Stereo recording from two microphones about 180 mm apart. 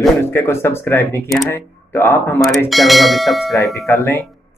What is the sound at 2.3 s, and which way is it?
Speech, centre (ahead or behind).